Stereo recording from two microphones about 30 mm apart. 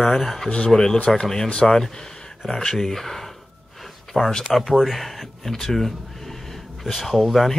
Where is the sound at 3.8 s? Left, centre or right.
Centre.